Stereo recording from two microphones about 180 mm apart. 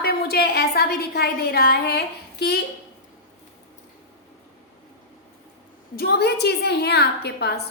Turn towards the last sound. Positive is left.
turn(degrees=65)  # may be behind; listen again after turning